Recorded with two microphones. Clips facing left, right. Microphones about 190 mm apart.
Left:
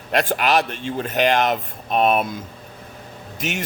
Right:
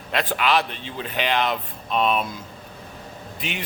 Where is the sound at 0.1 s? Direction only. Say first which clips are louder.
Left 3 dB; 45° left (ahead or behind).